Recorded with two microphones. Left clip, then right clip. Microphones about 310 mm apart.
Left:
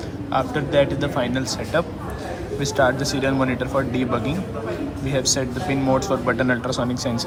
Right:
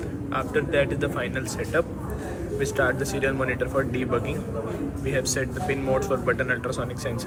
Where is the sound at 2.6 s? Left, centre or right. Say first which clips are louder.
Left 5 dB; centre.